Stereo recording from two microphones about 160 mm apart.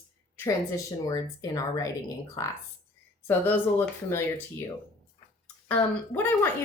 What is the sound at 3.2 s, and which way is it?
Speech, 15° left (ahead or behind).